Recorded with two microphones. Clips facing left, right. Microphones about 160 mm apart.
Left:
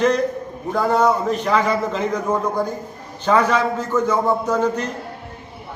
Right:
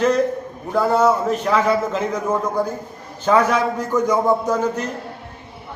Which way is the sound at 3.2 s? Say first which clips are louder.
Right 1 dB; 10° right (ahead or behind).